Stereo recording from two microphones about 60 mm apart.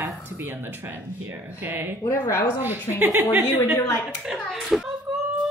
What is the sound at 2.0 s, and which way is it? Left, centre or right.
Speech, left.